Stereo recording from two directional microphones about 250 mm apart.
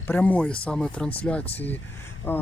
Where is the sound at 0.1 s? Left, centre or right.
Centre.